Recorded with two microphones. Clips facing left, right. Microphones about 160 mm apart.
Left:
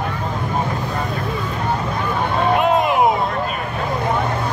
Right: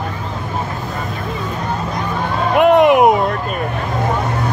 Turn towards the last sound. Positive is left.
turn(degrees=-65)  # may be behind; listen again after turning